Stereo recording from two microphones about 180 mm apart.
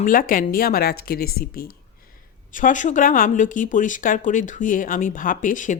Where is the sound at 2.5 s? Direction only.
45° left (ahead or behind).